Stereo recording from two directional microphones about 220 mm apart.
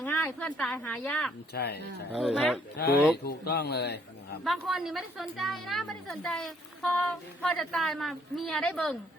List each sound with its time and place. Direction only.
0.0 s a woman's voice: 5° left (ahead or behind)
1.5 s a man's voice: 45° left (ahead or behind)
2.1 s a woman's voice: centre (ahead or behind)
2.8 s a man's voice: 45° left (ahead or behind)
4.4 s a woman's voice: centre (ahead or behind)